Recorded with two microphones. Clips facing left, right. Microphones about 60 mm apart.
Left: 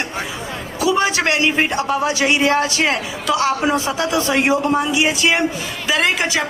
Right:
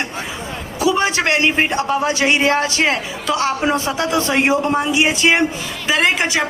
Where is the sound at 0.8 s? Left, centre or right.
Right.